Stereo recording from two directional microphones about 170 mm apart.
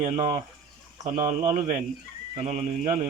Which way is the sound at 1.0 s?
45° right (ahead or behind).